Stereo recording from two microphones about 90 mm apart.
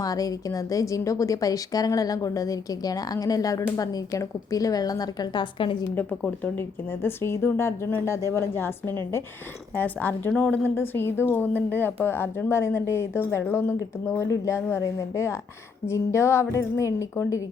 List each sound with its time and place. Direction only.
0.0 s a woman's voice: 40° left (ahead or behind); by 5.7 s 65° left (ahead or behind)
6.4 s a woman's voice: 25° left (ahead or behind)